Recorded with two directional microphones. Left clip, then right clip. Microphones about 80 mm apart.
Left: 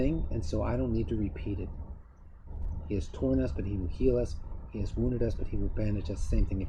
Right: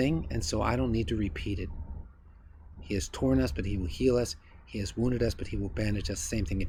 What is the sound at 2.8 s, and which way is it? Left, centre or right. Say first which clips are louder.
Speech: right 2 dB; right.